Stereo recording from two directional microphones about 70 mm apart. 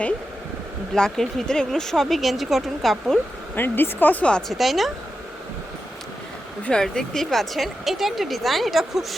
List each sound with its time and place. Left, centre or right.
0.9 s speech: centre
3.5 s speech: left
4.3 s a woman's voice: centre
4.5 s speech: centre
6.7 s speech: centre